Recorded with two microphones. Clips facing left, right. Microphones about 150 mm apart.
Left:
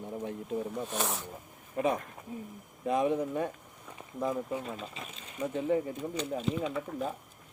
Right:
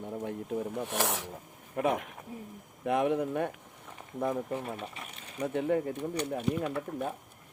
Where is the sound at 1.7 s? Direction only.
65° right (ahead or behind).